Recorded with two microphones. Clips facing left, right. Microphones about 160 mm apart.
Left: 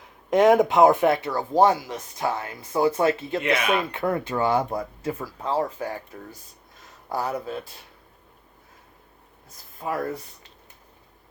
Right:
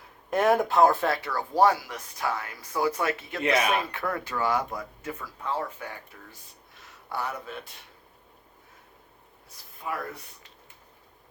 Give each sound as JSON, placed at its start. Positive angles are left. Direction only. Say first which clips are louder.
{"t": 0.3, "sound": "speech", "louder": "left 6 dB", "side_deg": 15}
{"t": 9.5, "sound": "speech", "louder": "left 5 dB", "side_deg": 45}